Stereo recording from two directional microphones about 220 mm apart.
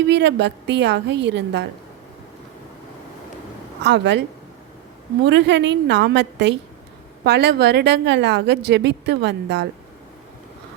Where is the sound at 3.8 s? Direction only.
50° right (ahead or behind).